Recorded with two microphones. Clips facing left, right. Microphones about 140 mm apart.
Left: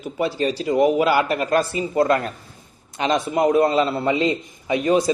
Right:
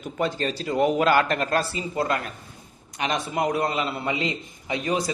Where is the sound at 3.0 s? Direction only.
25° left (ahead or behind).